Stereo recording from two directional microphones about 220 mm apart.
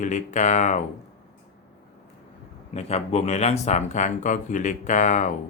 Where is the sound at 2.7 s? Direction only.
30° left (ahead or behind).